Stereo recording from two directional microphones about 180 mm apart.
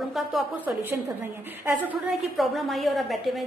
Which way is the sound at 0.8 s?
10° right (ahead or behind).